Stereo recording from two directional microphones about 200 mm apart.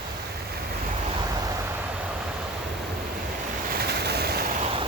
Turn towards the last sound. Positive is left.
turn(degrees=-30)  # may be behind; listen again after turning